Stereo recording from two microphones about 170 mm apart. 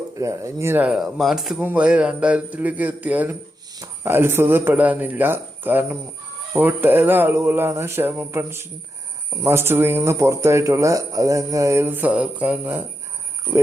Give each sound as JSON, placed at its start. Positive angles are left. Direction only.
{"t": 0.2, "sound": "speech", "side_deg": -20}